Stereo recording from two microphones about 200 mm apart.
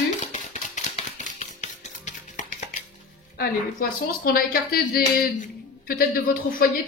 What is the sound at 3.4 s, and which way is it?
A woman's voice, 45° left (ahead or behind).